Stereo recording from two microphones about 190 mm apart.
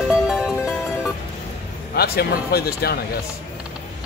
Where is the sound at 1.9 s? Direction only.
55° left (ahead or behind).